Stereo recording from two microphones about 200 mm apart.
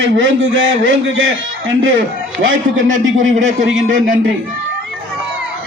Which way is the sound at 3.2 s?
40° right (ahead or behind).